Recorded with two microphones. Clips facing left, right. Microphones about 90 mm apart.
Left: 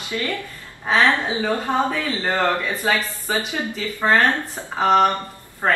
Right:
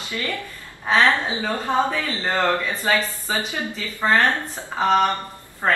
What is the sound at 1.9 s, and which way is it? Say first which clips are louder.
Speech: left 1 dB; 5° left (ahead or behind).